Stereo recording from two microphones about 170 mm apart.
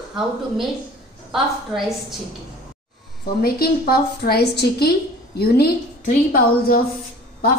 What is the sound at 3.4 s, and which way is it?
A woman's voice, 65° left (ahead or behind).